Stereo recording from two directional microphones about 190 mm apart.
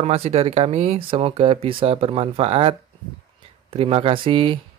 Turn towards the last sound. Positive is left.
turn(degrees=-25)  # may be behind; listen again after turning